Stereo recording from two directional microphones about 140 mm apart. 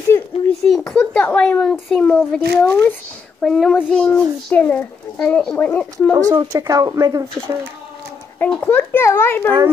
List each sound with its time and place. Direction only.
0.5 s a sound: 5° left (ahead or behind)
0.9 s a woman's voice: 10° left (ahead or behind)
3.3 s a child's voice: centre (ahead or behind)
6.1 s speech: 25° right (ahead or behind)
8.4 s a child's voice: 10° left (ahead or behind)